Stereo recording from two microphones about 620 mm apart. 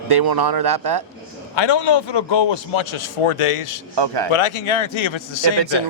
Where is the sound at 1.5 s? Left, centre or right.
Left.